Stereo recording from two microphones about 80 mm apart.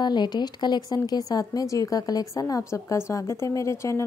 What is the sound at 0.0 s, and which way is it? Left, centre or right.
Speech, left.